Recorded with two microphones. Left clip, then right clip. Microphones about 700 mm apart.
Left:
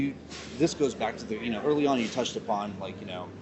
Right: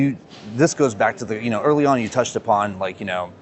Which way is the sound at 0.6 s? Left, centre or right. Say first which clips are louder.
Right 10 dB; right.